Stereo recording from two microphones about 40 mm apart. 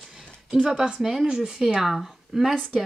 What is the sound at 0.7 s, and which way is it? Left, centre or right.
A woman's voice, centre.